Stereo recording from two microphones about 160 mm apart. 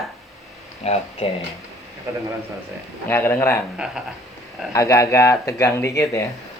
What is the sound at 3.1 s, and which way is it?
Speech, 15° left (ahead or behind).